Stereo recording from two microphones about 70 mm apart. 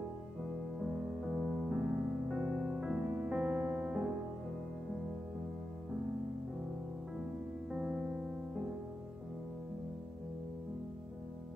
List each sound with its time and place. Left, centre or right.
1.2 s music: centre
3.3 s music: centre
7.7 s music: centre